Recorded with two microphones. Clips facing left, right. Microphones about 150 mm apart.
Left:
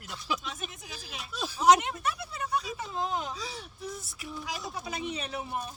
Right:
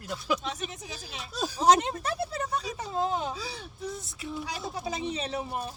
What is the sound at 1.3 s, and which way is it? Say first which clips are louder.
Speech: even; 40° right (ahead or behind).